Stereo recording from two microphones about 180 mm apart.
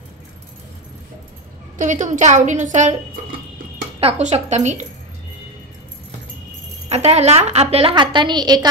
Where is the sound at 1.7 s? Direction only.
40° right (ahead or behind).